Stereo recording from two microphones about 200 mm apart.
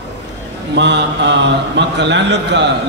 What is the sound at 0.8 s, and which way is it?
A man's voice, 60° right (ahead or behind).